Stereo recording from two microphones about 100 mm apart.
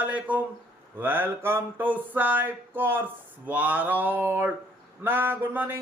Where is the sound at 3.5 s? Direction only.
15° right (ahead or behind).